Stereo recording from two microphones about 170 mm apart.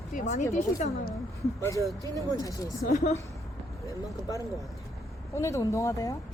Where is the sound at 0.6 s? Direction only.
45° left (ahead or behind).